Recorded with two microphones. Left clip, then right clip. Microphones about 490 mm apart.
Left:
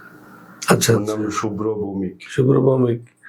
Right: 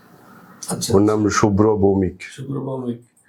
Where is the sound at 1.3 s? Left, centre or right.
Right.